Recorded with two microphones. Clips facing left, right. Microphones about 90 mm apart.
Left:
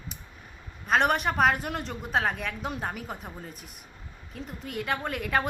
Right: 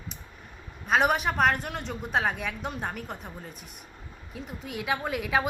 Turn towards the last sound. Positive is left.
turn(degrees=0)  # may be behind; listen again after turning